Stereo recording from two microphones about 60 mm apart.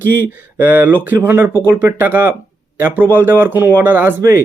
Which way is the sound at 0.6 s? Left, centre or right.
Right.